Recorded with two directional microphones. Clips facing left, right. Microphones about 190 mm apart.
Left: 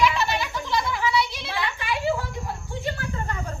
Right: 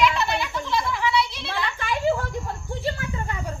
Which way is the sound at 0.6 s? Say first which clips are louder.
Left 1 dB; 15° left (ahead or behind).